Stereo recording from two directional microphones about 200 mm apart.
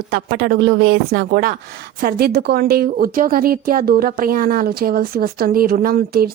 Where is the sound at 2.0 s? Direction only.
45° right (ahead or behind).